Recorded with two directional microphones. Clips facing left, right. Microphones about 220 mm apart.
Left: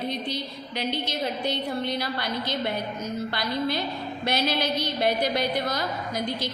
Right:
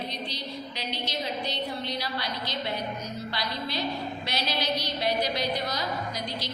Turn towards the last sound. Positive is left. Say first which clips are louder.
# left 3 dB
turn(degrees=50)  # may be behind; listen again after turning